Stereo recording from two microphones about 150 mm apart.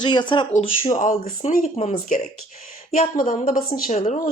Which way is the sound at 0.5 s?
55° left (ahead or behind).